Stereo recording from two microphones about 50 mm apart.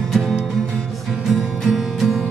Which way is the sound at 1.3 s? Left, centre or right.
Centre.